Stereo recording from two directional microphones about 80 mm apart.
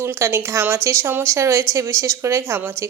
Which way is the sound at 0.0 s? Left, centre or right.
Right.